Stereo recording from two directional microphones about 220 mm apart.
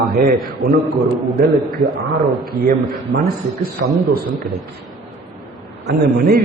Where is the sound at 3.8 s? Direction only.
65° right (ahead or behind).